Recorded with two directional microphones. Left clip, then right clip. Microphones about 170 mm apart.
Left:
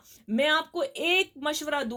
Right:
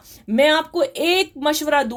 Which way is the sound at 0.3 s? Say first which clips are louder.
Right 9 dB; 35° right (ahead or behind).